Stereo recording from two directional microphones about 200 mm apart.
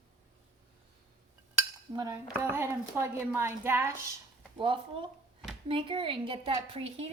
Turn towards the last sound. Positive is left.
turn(degrees=-30)  # may be behind; listen again after turning